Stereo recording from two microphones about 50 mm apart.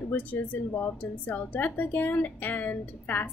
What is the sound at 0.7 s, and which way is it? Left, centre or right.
Speech, left.